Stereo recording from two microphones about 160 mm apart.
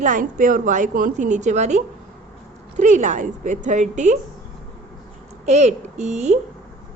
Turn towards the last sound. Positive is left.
turn(degrees=-45)  # may be behind; listen again after turning